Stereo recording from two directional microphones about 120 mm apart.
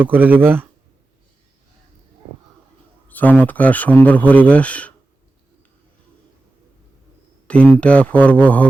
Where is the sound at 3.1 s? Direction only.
15° left (ahead or behind).